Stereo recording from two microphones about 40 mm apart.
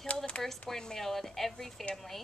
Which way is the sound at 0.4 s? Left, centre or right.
Centre.